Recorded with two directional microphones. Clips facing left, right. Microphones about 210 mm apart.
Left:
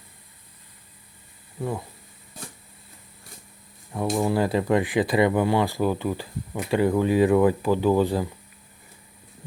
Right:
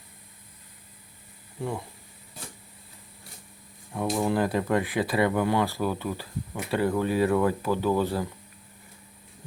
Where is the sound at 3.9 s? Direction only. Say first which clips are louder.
Left 2 dB; 5° left (ahead or behind).